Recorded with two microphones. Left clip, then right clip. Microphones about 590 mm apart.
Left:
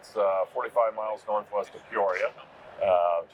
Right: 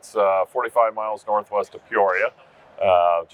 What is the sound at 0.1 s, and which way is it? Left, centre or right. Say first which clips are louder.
Speech: right 7 dB; right.